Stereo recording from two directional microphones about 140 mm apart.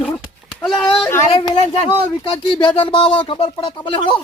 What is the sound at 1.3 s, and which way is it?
Speech, 35° left (ahead or behind).